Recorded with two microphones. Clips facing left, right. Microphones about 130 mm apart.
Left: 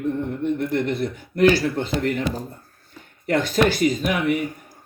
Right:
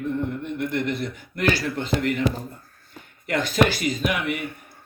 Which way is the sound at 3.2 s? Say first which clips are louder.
Left 2 dB; 50° left (ahead or behind).